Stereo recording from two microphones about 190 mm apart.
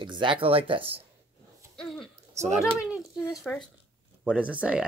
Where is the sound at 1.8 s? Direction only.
5° left (ahead or behind).